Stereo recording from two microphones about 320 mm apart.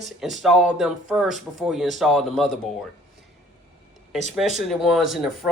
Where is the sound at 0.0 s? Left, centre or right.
Centre.